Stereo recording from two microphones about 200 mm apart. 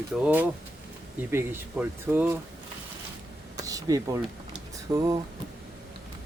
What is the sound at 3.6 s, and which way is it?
Speech, 15° right (ahead or behind).